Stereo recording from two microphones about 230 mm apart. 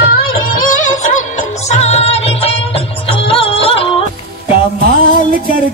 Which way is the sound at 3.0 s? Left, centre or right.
Left.